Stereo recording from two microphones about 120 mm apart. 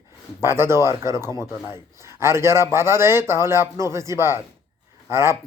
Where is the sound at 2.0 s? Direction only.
20° right (ahead or behind).